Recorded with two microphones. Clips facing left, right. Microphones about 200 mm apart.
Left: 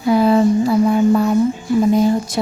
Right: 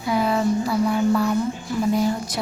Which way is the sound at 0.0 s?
35° left (ahead or behind).